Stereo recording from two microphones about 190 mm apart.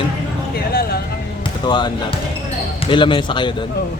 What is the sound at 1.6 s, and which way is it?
Speech, 25° left (ahead or behind).